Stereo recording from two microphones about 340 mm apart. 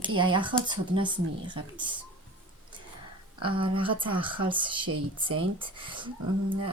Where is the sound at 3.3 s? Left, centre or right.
Centre.